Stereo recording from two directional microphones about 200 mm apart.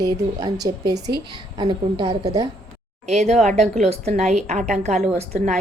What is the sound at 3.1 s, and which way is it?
A woman's voice, 35° right (ahead or behind).